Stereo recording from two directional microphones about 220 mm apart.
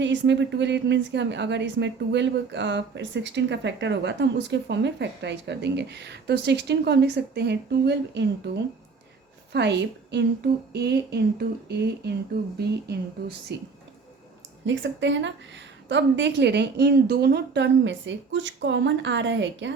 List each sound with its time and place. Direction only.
0.0 s a woman's voice: 55° right (ahead or behind)
14.6 s a woman's voice: 55° right (ahead or behind)